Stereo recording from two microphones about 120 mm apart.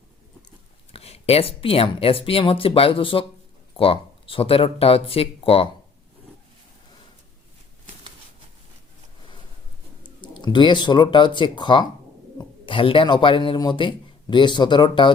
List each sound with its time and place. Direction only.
0.9 s speech: 60° left (ahead or behind)
10.2 s speech: 40° left (ahead or behind)